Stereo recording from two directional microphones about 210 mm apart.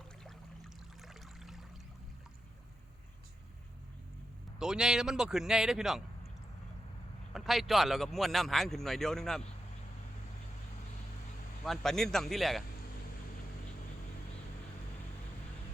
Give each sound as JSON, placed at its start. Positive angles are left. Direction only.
{"t": 1.0, "sound": "a sound", "side_deg": 0}
{"t": 4.6, "sound": "speech", "side_deg": -5}
{"t": 7.3, "sound": "speech", "side_deg": 0}
{"t": 11.6, "sound": "speech", "side_deg": 0}